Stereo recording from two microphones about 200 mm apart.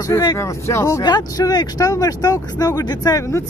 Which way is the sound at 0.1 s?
15° left (ahead or behind).